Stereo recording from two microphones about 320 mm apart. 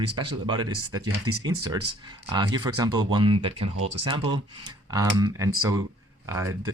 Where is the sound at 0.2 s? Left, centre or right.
Centre.